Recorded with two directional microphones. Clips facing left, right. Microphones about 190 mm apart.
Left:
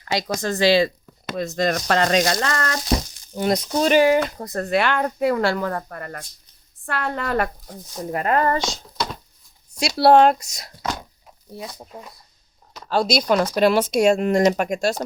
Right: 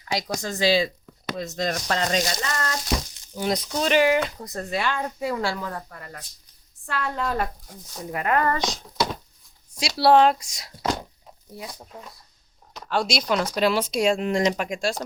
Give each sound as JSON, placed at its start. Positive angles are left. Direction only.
{"t": 0.0, "sound": "speech", "side_deg": 80}
{"t": 0.3, "sound": "speech", "side_deg": 60}
{"t": 3.3, "sound": "speech", "side_deg": 50}
{"t": 4.4, "sound": "speech", "side_deg": 60}
{"t": 8.1, "sound": "speech", "side_deg": 35}
{"t": 9.8, "sound": "speech", "side_deg": 55}
{"t": 11.5, "sound": "speech", "side_deg": 20}
{"t": 12.9, "sound": "speech", "side_deg": 40}